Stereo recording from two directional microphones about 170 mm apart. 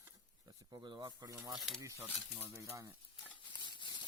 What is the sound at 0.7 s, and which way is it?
Speech, 25° right (ahead or behind).